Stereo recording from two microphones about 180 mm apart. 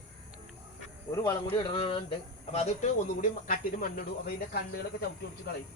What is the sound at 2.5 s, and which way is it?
Speech, 40° left (ahead or behind).